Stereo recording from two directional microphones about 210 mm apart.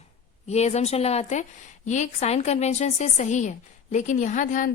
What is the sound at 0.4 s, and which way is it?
Speech, 30° left (ahead or behind).